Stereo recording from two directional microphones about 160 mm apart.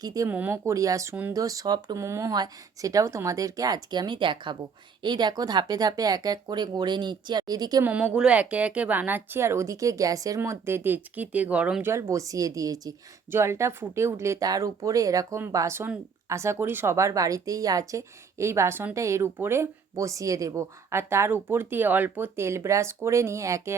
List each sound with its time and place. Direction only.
0.0 s speech: 20° right (ahead or behind)
0.3 s speech: 10° right (ahead or behind)
7.9 s speech: 10° right (ahead or behind)